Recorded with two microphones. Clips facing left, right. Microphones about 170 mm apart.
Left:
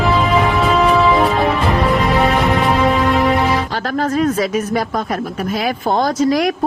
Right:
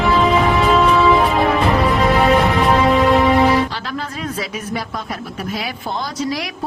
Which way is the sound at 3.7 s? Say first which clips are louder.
Left 8 dB; 45° left (ahead or behind).